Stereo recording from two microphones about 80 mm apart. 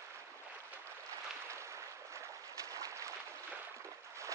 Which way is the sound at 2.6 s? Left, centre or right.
Right.